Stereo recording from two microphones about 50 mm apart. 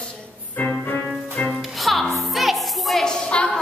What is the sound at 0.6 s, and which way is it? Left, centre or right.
Music, left.